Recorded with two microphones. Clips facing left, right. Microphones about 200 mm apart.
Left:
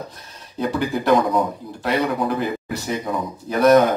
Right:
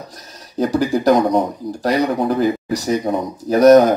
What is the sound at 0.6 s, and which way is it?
A man's voice, 40° right (ahead or behind).